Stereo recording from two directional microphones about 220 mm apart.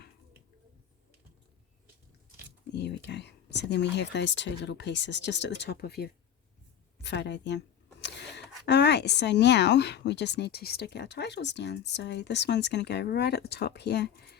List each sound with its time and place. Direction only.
2.7 s speech: 50° left (ahead or behind)